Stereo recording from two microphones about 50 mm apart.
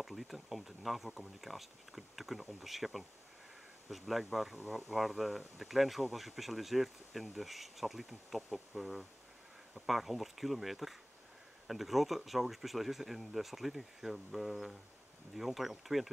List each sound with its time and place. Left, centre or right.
0.0 s speech: centre